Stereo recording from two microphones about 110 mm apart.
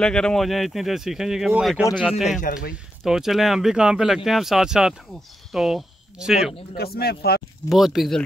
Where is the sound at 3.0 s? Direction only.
5° right (ahead or behind).